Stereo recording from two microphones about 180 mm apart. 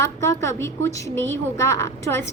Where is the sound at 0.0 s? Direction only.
15° left (ahead or behind).